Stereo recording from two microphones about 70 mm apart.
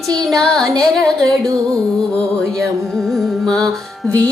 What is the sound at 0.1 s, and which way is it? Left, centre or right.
Music, centre.